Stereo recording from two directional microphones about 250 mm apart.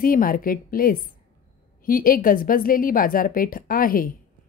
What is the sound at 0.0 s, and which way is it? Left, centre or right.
A woman's voice, left.